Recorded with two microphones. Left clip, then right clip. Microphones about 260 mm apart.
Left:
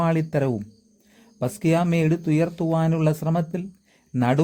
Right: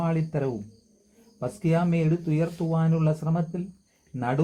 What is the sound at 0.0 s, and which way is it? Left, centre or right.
Speech, left.